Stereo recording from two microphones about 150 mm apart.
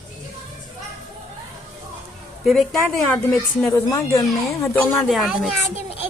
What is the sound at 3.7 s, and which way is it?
Speech, 20° left (ahead or behind).